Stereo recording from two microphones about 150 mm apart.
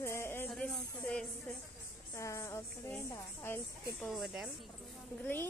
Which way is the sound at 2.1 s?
20° left (ahead or behind).